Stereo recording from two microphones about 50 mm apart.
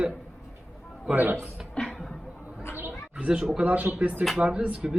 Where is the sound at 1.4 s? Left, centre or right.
Centre.